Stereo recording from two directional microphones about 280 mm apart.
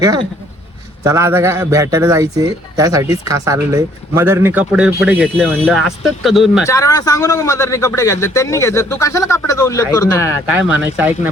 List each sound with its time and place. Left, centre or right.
0.0 s a man's voice: centre
6.7 s speech: centre
10.7 s speech: centre